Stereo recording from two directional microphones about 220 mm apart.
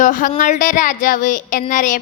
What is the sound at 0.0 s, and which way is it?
Child singing, 35° left (ahead or behind).